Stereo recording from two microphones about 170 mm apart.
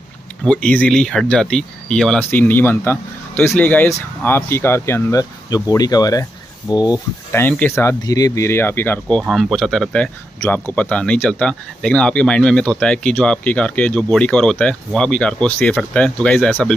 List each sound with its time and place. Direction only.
0.4 s speech: 5° left (ahead or behind); by 7.4 s 25° left (ahead or behind)
7.4 s speech: 10° left (ahead or behind)
9.2 s speech: centre (ahead or behind)